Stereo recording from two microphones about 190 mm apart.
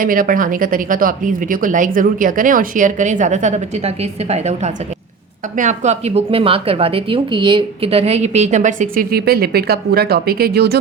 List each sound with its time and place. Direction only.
0.0 s a woman's voice: 45° right (ahead or behind)